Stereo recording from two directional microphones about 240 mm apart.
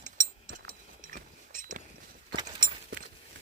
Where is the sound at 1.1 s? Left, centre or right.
Right.